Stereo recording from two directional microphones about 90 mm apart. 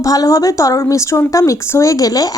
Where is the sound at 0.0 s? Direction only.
40° left (ahead or behind).